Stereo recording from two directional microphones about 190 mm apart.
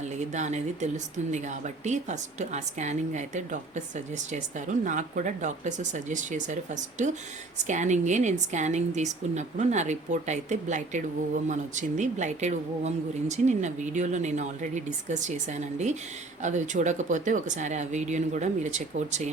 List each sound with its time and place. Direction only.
0.0 s speech: 40° right (ahead or behind)